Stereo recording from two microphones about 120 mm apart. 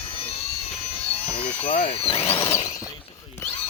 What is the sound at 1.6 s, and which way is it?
Speech, 55° left (ahead or behind).